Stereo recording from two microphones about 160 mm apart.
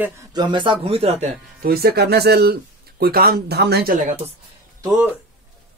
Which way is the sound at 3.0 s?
70° right (ahead or behind).